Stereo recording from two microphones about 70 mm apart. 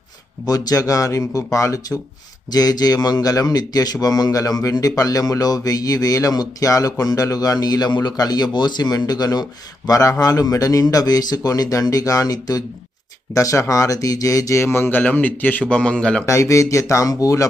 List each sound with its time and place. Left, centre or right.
0.4 s speech: left
2.5 s speech: left
9.0 s speech: left
13.3 s speech: left; by 16.2 s centre
16.2 s speech: left